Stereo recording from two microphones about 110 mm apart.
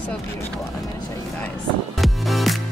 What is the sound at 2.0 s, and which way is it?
Music, centre (ahead or behind).